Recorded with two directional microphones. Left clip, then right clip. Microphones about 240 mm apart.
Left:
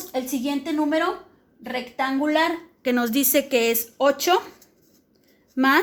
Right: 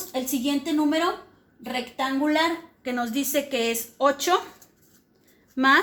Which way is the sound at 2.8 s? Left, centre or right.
Left.